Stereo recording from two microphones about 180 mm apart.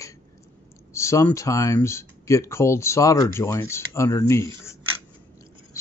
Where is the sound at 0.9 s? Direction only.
15° left (ahead or behind).